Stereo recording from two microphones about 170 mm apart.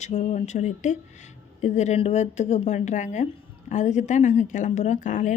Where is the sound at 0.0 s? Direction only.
40° left (ahead or behind).